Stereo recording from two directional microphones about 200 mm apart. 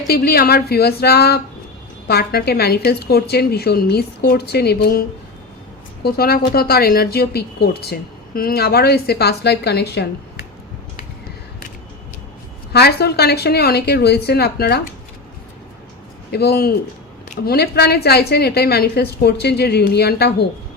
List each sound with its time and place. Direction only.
0.1 s speech: 50° left (ahead or behind)
12.7 s speech: 55° left (ahead or behind)
16.3 s speech: 55° left (ahead or behind)